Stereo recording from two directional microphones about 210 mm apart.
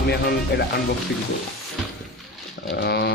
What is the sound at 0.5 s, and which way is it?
Speech, 50° left (ahead or behind).